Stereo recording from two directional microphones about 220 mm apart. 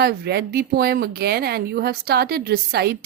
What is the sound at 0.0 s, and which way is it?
A woman's voice, 45° right (ahead or behind).